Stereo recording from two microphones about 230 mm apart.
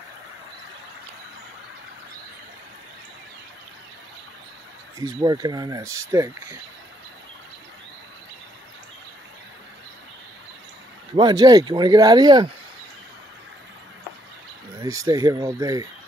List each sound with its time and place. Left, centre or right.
4.9 s speech: centre
11.1 s speech: centre
14.8 s speech: centre